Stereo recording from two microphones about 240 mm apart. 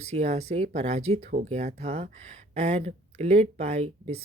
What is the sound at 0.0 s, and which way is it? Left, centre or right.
Speech, right.